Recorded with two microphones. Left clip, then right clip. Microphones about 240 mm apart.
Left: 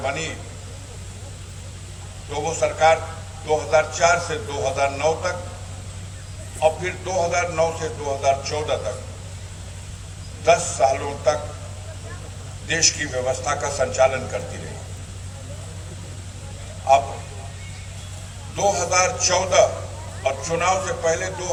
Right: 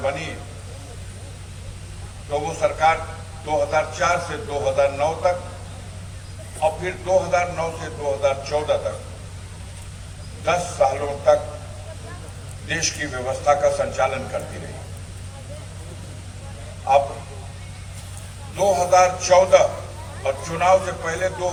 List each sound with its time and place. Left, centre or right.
0.0 s a man's voice: left
2.3 s a man's voice: left
6.6 s a man's voice: left
10.4 s a man's voice: left
12.6 s a man's voice: left
18.5 s a man's voice: left